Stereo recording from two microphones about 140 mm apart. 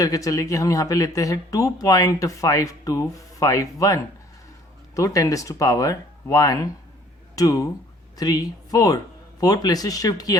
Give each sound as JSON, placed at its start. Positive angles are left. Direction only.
{"t": 0.0, "sound": "speech", "side_deg": 25}